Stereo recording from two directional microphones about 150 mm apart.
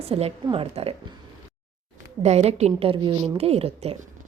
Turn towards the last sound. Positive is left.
turn(degrees=-40)  # may be behind; listen again after turning